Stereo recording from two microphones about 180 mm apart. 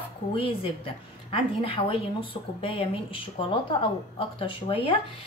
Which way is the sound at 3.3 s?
30° left (ahead or behind).